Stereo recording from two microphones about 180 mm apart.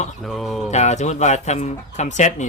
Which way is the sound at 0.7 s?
40° left (ahead or behind).